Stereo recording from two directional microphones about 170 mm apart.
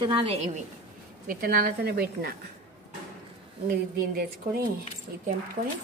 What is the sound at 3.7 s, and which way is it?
Speech, 65° right (ahead or behind).